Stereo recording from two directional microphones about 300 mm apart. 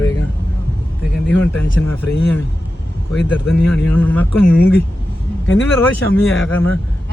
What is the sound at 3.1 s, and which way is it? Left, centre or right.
Speech, centre.